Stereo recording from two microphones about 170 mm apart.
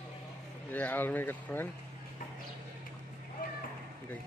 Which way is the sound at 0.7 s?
10° left (ahead or behind).